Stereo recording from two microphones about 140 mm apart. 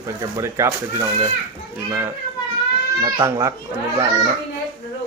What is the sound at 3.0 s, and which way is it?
Speech, 25° right (ahead or behind).